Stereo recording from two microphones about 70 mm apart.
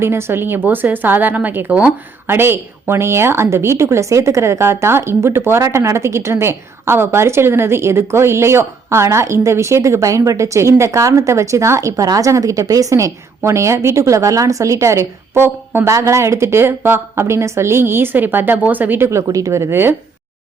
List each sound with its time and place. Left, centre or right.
0.0 s a woman's voice: right
19.3 s speech: right